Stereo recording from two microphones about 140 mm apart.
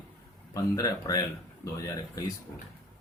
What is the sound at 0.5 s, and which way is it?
Speech, 25° left (ahead or behind).